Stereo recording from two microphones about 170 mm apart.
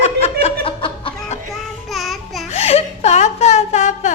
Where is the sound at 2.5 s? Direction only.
40° left (ahead or behind).